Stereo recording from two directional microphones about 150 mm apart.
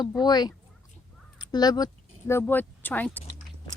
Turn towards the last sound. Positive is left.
turn(degrees=10)  # may be behind; listen again after turning